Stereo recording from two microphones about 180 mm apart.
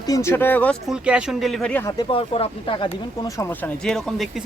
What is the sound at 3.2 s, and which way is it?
A man's voice, 15° left (ahead or behind).